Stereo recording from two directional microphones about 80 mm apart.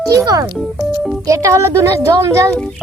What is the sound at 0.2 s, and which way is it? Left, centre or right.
A child's voice, right.